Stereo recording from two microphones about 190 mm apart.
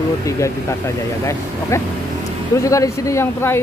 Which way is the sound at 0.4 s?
15° left (ahead or behind).